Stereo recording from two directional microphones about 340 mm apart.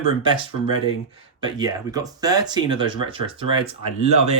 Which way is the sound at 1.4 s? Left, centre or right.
Centre.